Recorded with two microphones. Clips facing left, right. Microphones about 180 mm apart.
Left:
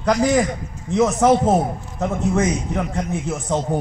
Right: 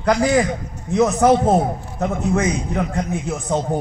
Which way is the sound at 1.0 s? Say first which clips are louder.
Right 1 dB; 15° right (ahead or behind).